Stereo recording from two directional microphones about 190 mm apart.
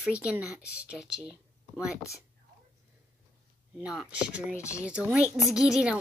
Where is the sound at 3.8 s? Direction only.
5° right (ahead or behind).